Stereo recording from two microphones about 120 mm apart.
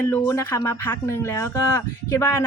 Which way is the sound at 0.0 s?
20° left (ahead or behind).